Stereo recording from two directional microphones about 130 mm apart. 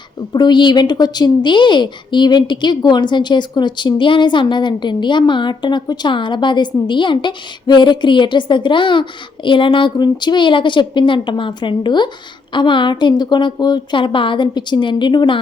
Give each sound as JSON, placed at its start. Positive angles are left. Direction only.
{"t": 0.3, "sound": "a woman's voice", "side_deg": 35}